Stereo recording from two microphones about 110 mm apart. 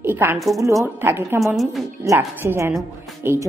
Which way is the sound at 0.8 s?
20° right (ahead or behind).